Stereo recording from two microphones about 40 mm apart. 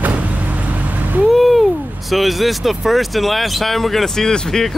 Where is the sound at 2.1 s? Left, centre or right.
Centre.